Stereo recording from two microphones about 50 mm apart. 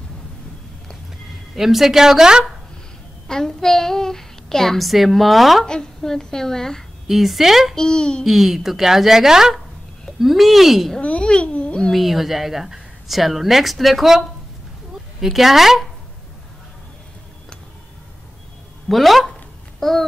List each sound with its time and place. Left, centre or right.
1.5 s speech: centre
3.3 s a child's voice: centre
5.7 s a child's voice: centre
7.1 s a woman's voice: centre
7.7 s a child's voice: centre
8.2 s a woman's voice: centre
11.0 s a sound: left
11.9 s a woman's voice: centre
15.1 s a woman's voice: centre
18.9 s a woman's voice: centre